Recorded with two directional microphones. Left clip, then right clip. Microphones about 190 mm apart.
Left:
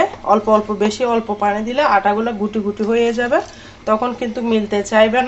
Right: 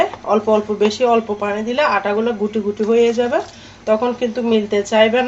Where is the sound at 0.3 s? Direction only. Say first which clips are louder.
Left 3 dB; 15° left (ahead or behind).